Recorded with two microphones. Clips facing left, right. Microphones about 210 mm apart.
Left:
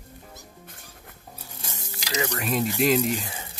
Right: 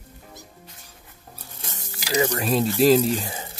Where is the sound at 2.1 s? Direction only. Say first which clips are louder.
Right 5 dB; 35° right (ahead or behind).